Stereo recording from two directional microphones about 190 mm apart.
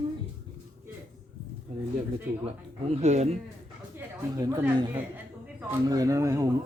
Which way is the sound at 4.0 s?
15° right (ahead or behind).